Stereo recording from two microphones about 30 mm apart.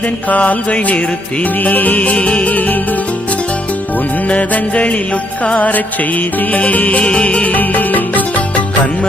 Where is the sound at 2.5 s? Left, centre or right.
Left.